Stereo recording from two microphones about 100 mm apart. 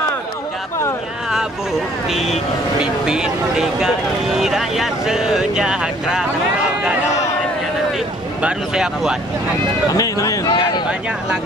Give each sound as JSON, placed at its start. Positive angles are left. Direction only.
{"t": 2.0, "sound": "speech", "side_deg": 0}
{"t": 8.4, "sound": "speech", "side_deg": -10}
{"t": 9.8, "sound": "a sound", "side_deg": 35}